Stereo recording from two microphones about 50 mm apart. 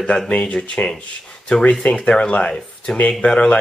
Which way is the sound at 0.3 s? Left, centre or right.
Left.